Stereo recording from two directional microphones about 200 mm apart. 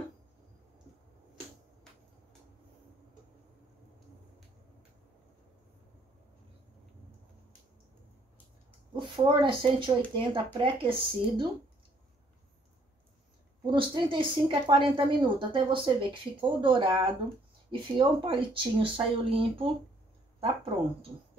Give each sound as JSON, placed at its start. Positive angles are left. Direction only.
{"t": 8.9, "sound": "speech", "side_deg": -25}
{"t": 13.7, "sound": "speech", "side_deg": -25}